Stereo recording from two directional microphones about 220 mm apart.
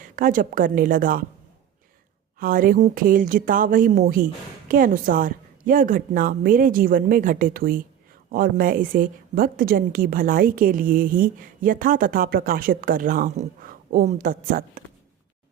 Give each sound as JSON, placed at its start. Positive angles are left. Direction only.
{"t": 0.0, "sound": "a woman's voice", "side_deg": -35}
{"t": 2.4, "sound": "a woman's voice", "side_deg": -40}